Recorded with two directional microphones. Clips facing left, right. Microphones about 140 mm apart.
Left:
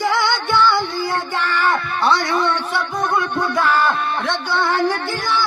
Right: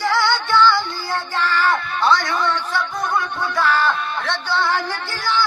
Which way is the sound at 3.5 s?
20° left (ahead or behind).